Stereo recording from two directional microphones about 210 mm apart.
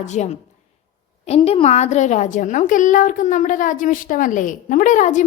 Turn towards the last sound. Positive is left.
turn(degrees=35)  # may be behind; listen again after turning